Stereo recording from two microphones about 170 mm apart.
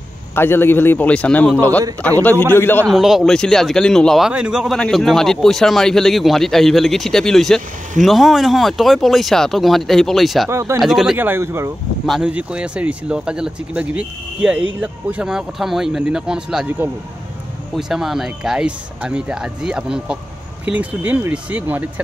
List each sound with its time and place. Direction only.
0.3 s a man's voice: 15° left (ahead or behind)
2.9 s speech: centre (ahead or behind)
10.5 s speech: 15° right (ahead or behind)
10.8 s speech: centre (ahead or behind)
11.1 s speech: 15° right (ahead or behind)